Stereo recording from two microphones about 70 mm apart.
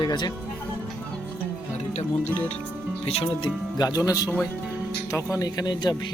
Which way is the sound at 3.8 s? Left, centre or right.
Left.